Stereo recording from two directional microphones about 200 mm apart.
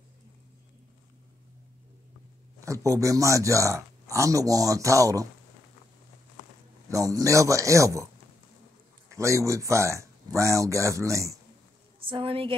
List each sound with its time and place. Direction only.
2.6 s speech: 15° right (ahead or behind)
6.9 s speech: 15° right (ahead or behind)
9.1 s speech: 15° right (ahead or behind)
12.0 s speech: 25° right (ahead or behind)